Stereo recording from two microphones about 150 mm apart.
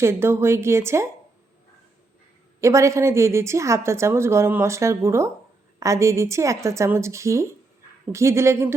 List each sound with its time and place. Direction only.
0.0 s speech: 15° right (ahead or behind)
2.6 s a woman's voice: 20° right (ahead or behind)